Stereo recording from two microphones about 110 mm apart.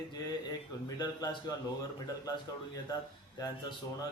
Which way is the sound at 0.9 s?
35° left (ahead or behind).